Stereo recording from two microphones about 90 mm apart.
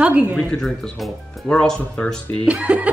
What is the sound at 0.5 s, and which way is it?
Speech, 5° left (ahead or behind).